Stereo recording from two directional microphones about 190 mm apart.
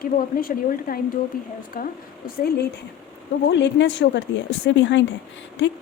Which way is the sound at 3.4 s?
70° left (ahead or behind).